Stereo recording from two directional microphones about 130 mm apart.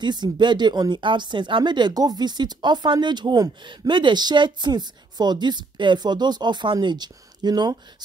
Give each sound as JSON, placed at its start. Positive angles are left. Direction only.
{"t": 0.0, "sound": "speech", "side_deg": -35}